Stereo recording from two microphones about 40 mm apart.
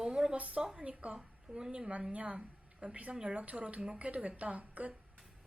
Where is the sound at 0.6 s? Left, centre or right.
Right.